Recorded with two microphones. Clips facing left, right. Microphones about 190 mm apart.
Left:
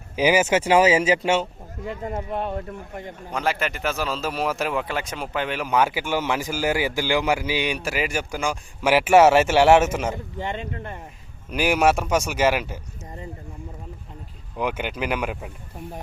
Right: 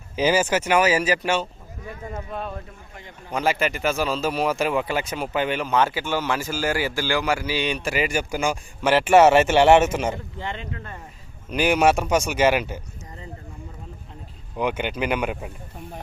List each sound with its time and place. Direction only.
0.2 s speech: 15° left (ahead or behind)
2.6 s speech: 50° left (ahead or behind)
3.3 s a man's voice: centre (ahead or behind)
5.6 s a man's voice: 10° left (ahead or behind)
8.8 s a man's voice: 10° left (ahead or behind)
11.5 s a man's voice: 5° left (ahead or behind)
14.6 s a man's voice: 5° left (ahead or behind)